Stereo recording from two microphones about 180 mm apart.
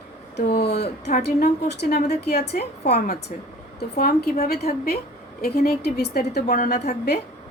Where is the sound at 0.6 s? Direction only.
65° left (ahead or behind).